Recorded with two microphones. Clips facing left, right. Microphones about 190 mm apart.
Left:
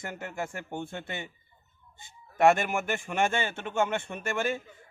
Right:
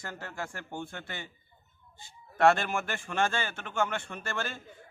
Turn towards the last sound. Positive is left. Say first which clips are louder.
# left 6 dB
turn(degrees=15)  # may be behind; listen again after turning